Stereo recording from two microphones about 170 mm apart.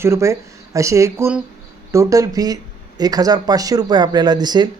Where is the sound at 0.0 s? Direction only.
15° right (ahead or behind).